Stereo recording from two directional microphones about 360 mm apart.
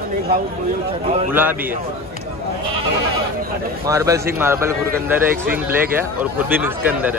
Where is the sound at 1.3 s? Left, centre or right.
Centre.